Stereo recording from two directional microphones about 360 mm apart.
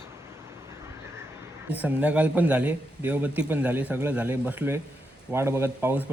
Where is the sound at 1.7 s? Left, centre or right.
Centre.